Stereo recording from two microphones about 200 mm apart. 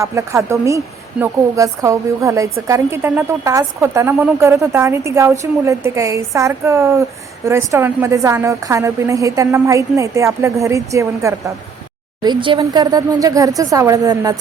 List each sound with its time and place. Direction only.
0.0 s a woman's voice: 15° right (ahead or behind)